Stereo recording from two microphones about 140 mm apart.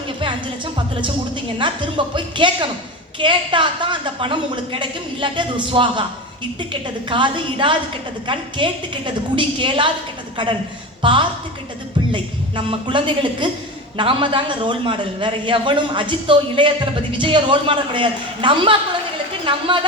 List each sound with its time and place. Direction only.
0.2 s a man's voice: 35° right (ahead or behind)
7.1 s a man's voice: 35° right (ahead or behind)
11.0 s a woman's voice: 35° right (ahead or behind)